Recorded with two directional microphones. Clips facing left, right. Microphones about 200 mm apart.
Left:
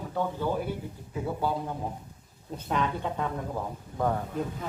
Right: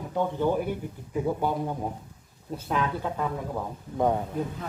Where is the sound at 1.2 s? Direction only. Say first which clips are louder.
Right 2 dB; 15° right (ahead or behind).